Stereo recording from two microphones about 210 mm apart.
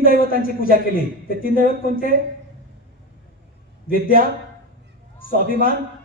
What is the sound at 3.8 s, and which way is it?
Speech, 45° left (ahead or behind).